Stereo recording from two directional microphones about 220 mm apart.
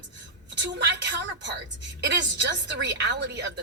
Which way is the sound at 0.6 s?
50° right (ahead or behind).